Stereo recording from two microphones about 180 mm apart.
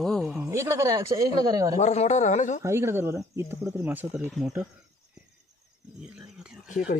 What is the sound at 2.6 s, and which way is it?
Speech, 15° right (ahead or behind).